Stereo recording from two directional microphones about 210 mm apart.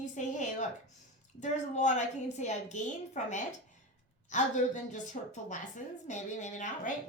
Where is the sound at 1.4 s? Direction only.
35° left (ahead or behind).